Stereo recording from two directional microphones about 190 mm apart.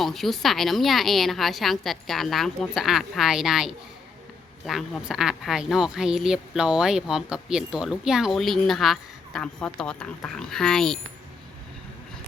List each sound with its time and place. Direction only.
0.0 s speech: centre (ahead or behind)